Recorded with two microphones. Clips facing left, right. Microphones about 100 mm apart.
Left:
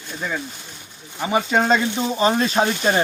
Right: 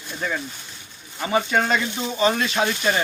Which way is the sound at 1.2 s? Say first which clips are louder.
Left 2 dB; 20° left (ahead or behind).